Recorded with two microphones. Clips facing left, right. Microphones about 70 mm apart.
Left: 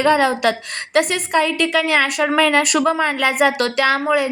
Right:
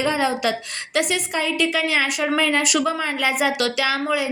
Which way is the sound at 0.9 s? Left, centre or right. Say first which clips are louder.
Left 6 dB; left.